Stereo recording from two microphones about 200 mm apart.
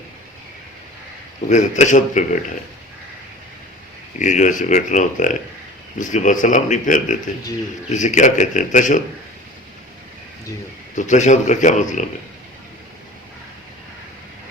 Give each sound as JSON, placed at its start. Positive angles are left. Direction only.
{"t": 1.5, "sound": "speech", "side_deg": 35}
{"t": 4.2, "sound": "speech", "side_deg": 40}
{"t": 10.9, "sound": "speech", "side_deg": 40}